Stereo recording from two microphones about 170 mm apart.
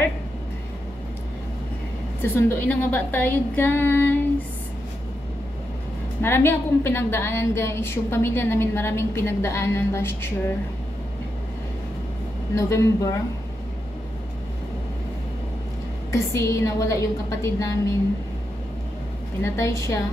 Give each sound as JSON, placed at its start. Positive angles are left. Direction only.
{"t": 2.2, "sound": "a woman's voice", "side_deg": 10}
{"t": 6.2, "sound": "a woman's voice", "side_deg": 15}
{"t": 12.5, "sound": "a woman's voice", "side_deg": 15}
{"t": 16.1, "sound": "a woman's voice", "side_deg": 20}
{"t": 19.4, "sound": "a woman's voice", "side_deg": 15}